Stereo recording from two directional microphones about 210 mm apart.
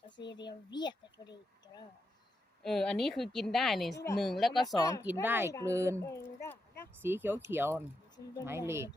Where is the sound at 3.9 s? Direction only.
15° left (ahead or behind).